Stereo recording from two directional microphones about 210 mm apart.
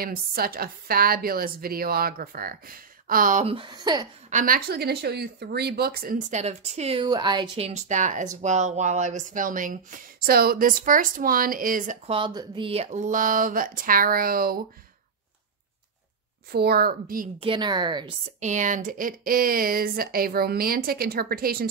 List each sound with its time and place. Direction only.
0.0 s speech: 45° right (ahead or behind)
3.4 s a woman's voice: 25° right (ahead or behind)
4.3 s speech: 40° right (ahead or behind)
12.2 s speech: 25° right (ahead or behind); by 14.6 s 45° right (ahead or behind)
16.5 s speech: 50° right (ahead or behind)
17.4 s a woman's voice: 20° right (ahead or behind)
18.4 s speech: 35° right (ahead or behind)